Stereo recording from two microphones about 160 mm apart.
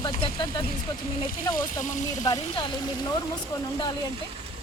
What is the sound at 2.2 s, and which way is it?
Speech, 25° left (ahead or behind).